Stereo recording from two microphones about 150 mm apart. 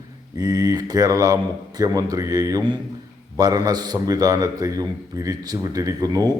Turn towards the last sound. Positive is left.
turn(degrees=-25)  # may be behind; listen again after turning